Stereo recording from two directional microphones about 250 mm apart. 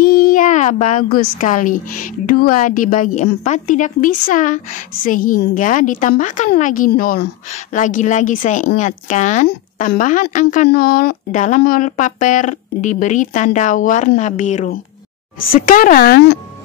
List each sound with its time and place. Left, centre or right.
0.2 s speech: left